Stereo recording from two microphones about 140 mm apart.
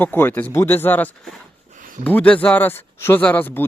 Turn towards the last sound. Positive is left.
turn(degrees=15)  # may be behind; listen again after turning